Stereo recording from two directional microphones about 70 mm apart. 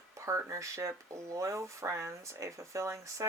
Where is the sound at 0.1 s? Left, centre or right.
Right.